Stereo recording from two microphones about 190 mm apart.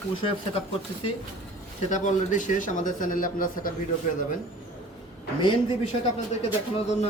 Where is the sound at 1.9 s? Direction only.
40° left (ahead or behind).